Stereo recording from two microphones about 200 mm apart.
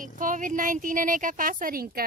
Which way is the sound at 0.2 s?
40° right (ahead or behind).